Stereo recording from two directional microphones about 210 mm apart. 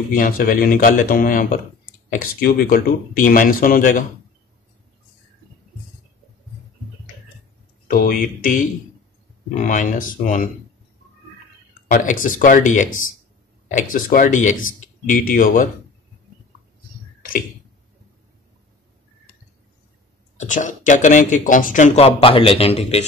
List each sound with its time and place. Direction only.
0.1 s speech: 40° left (ahead or behind)
7.9 s speech: 40° left (ahead or behind)
9.6 s speech: 40° left (ahead or behind)
11.9 s speech: 40° left (ahead or behind)
20.3 s speech: 35° left (ahead or behind)